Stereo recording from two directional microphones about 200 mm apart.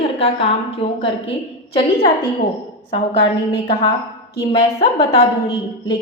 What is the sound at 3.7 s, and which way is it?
A woman's voice, 30° left (ahead or behind).